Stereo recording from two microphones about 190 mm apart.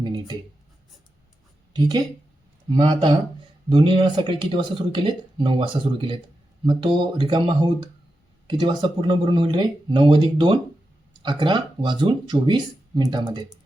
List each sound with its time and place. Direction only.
0.0 s writing: 20° right (ahead or behind)
2.7 s speech: 25° right (ahead or behind)